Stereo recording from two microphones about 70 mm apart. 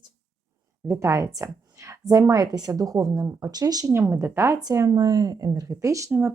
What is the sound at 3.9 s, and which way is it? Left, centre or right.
Speech, right.